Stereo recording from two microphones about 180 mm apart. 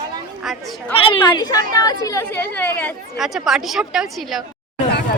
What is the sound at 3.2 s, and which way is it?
Speech, centre (ahead or behind).